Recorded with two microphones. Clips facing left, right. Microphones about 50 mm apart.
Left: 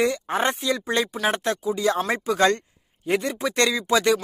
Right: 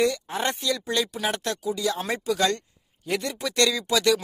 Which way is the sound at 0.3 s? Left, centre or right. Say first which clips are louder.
Left 4 dB; left.